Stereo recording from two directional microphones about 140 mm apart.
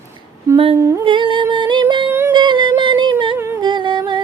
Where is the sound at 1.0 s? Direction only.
35° right (ahead or behind).